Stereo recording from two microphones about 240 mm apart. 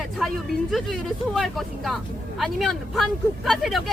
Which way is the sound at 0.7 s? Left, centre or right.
Centre.